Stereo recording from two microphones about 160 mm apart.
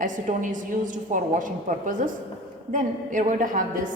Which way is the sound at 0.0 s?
55° right (ahead or behind).